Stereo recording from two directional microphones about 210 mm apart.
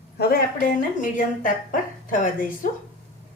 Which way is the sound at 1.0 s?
40° left (ahead or behind).